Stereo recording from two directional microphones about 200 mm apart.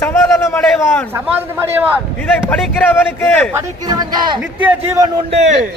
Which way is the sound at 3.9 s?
20° right (ahead or behind).